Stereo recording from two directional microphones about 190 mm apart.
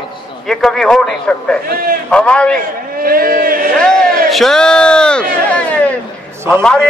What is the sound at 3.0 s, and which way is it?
Speech, 50° right (ahead or behind).